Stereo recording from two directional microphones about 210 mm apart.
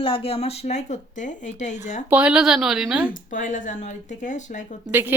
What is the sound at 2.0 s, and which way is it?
Speech, 5° right (ahead or behind).